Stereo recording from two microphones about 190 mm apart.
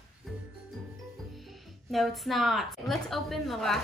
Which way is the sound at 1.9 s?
Centre (ahead or behind).